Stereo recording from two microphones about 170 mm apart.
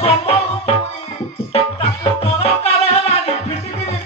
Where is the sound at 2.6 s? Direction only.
35° left (ahead or behind).